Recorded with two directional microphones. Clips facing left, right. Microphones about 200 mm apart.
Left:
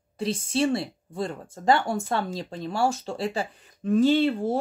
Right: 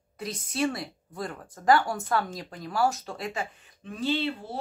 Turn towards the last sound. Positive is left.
turn(degrees=45)  # may be behind; listen again after turning